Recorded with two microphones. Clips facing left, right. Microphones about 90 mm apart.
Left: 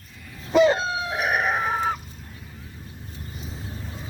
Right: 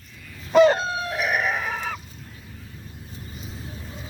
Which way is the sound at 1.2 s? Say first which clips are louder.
Left 2 dB; 40° left (ahead or behind).